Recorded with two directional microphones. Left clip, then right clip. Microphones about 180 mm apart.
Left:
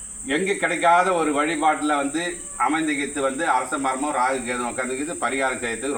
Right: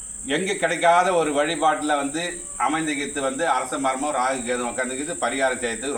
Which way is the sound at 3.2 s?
20° right (ahead or behind).